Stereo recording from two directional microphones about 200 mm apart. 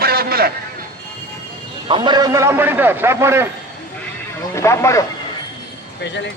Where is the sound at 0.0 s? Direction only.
50° right (ahead or behind).